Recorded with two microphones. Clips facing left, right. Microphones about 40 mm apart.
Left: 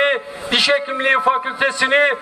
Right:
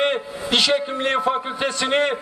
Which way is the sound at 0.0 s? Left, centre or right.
Centre.